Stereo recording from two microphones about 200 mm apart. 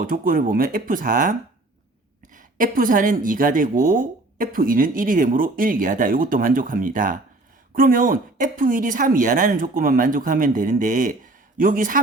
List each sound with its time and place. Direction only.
0.0 s speech: 45° right (ahead or behind)